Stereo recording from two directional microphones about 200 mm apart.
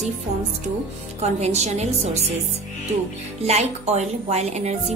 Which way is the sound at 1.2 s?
35° right (ahead or behind).